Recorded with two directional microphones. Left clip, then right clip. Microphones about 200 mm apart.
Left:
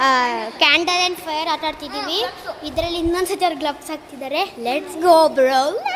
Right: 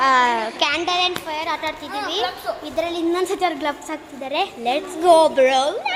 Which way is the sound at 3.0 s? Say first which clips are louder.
Left 1 dB; 15° left (ahead or behind).